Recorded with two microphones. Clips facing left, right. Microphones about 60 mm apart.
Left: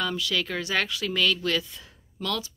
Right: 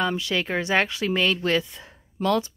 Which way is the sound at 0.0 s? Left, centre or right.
Right.